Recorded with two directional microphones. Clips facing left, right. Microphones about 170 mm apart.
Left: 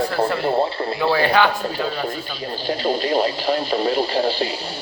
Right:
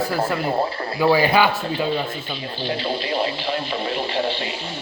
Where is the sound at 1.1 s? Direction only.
10° right (ahead or behind).